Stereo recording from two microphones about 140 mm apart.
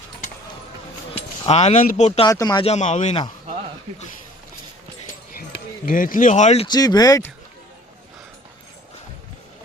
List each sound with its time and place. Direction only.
1.1 s a sound: 50° left (ahead or behind)
1.8 s speech: 75° left (ahead or behind)
2.2 s speech: 25° left (ahead or behind)
2.6 s speech: 55° left (ahead or behind)
5.3 s speech: 90° left; by 6.7 s 55° left (ahead or behind)
6.7 s speech: 30° left (ahead or behind)